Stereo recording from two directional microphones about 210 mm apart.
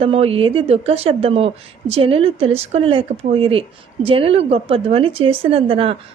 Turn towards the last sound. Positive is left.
turn(degrees=-25)  # may be behind; listen again after turning